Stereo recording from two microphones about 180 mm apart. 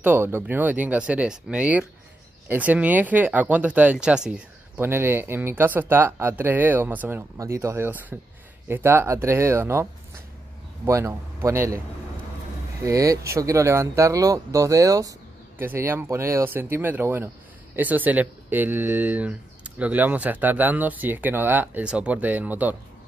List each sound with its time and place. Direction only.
0.0 s speech: 10° right (ahead or behind)
10.9 s speech: 15° right (ahead or behind)
12.8 s speech: 20° right (ahead or behind)